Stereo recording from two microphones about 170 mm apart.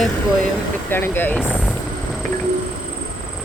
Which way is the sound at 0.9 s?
10° left (ahead or behind).